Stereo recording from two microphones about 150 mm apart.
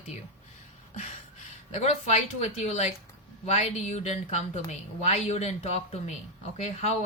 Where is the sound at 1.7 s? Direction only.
45° left (ahead or behind).